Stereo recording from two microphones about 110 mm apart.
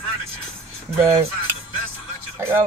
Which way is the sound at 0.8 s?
20° right (ahead or behind).